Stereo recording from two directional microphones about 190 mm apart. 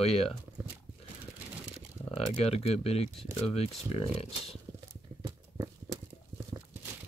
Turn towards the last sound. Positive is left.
turn(degrees=-20)  # may be behind; listen again after turning